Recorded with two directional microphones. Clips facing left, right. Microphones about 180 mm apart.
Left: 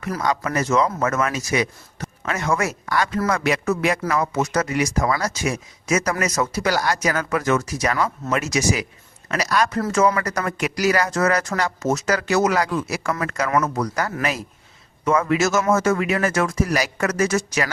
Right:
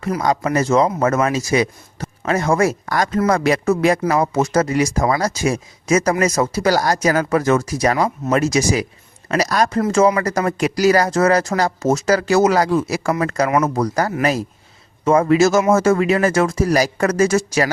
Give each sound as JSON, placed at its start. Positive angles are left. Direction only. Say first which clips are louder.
{"t": 0.2, "sound": "speech", "louder": "right 4 dB", "side_deg": -35}